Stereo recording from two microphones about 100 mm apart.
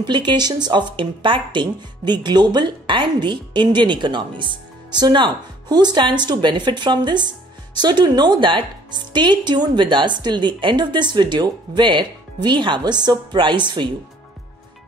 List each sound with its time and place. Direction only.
0.0 s speech: 50° right (ahead or behind)